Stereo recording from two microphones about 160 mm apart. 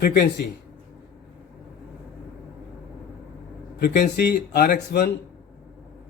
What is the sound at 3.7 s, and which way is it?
Speech, 75° left (ahead or behind).